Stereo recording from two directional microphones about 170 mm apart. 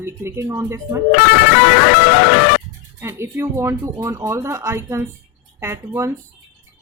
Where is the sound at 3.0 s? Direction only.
15° right (ahead or behind).